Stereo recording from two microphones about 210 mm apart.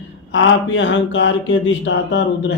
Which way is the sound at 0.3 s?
60° left (ahead or behind).